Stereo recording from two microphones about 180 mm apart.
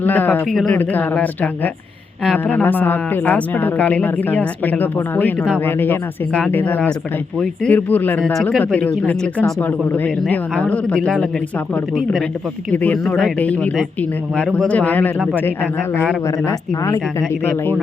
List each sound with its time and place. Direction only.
0.0 s speech: 10° left (ahead or behind)